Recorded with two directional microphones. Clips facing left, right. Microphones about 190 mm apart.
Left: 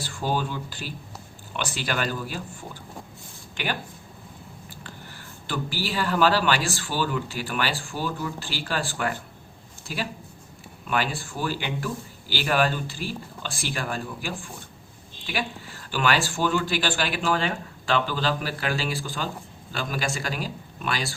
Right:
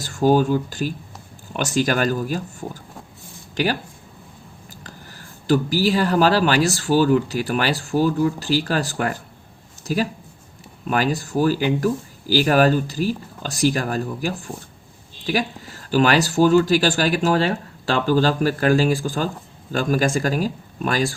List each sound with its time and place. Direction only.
0.0 s speech: 45° right (ahead or behind)
4.7 s a sound: 40° right (ahead or behind)
5.5 s speech: 40° right (ahead or behind)